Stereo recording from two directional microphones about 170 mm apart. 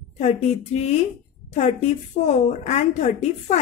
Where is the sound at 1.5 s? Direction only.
40° left (ahead or behind).